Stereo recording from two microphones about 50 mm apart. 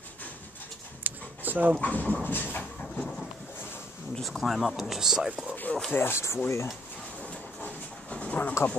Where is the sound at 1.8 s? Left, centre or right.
Left.